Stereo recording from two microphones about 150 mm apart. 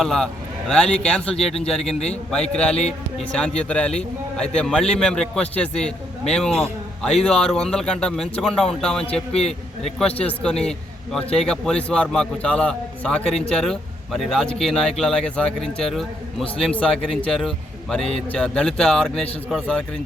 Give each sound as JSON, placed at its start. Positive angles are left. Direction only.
{"t": 0.0, "sound": "a man's voice", "side_deg": 5}
{"t": 1.8, "sound": "a man's voice", "side_deg": 45}
{"t": 2.0, "sound": "a man's voice", "side_deg": 5}
{"t": 10.2, "sound": "a man's voice", "side_deg": 5}